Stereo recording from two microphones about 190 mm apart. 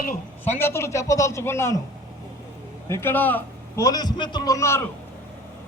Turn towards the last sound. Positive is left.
turn(degrees=15)  # may be behind; listen again after turning